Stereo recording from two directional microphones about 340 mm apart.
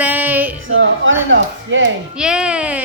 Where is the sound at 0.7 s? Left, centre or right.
Right.